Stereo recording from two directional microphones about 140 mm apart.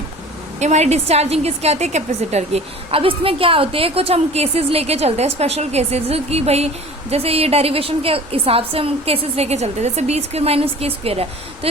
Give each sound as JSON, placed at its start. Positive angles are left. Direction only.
{"t": 0.6, "sound": "a woman's voice", "side_deg": -55}